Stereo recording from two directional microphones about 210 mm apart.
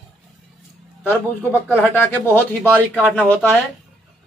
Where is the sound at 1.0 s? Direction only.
10° left (ahead or behind).